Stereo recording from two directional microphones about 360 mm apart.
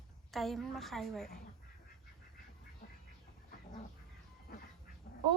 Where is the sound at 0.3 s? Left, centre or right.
Centre.